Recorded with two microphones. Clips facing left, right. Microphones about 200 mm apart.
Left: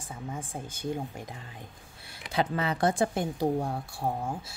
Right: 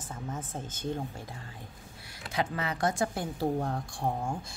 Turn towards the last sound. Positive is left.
turn(degrees=5)  # may be behind; listen again after turning